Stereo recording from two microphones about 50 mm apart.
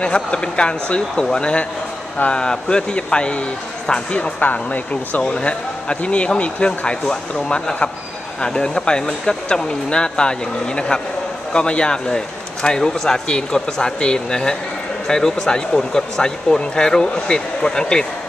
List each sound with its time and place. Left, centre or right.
0.0 s speech: centre
5.2 s speech: centre
11.5 s speech: centre